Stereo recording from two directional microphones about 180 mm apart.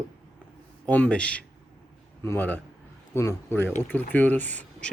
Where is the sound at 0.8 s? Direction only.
10° left (ahead or behind).